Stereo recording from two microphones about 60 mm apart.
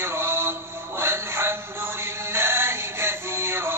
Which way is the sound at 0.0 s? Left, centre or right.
Right.